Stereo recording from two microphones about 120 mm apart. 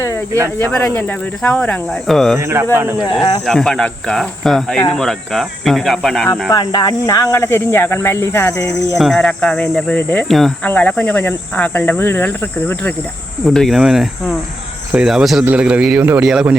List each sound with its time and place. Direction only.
0.6 s speech: 15° left (ahead or behind)
2.4 s speech: 25° right (ahead or behind)
3.4 s speech: 5° left (ahead or behind)
6.5 s speech: 35° left (ahead or behind)
9.0 s speech: 5° left (ahead or behind)
10.2 s speech: centre (ahead or behind)
13.5 s a man's voice: centre (ahead or behind)